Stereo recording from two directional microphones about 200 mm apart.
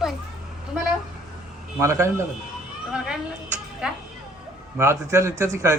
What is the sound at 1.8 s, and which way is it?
Speech, 15° right (ahead or behind).